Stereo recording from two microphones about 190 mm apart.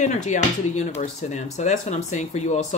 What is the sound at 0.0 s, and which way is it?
Speech, 40° left (ahead or behind).